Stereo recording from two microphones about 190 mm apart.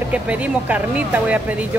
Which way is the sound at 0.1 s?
5° right (ahead or behind).